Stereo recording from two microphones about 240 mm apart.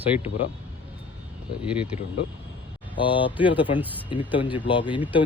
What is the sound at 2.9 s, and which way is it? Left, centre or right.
Speech, left.